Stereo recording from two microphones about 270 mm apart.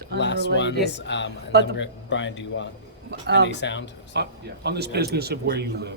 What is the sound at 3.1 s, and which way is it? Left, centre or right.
Speech, right.